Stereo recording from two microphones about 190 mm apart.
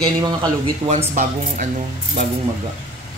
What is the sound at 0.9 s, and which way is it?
Speech, 40° right (ahead or behind).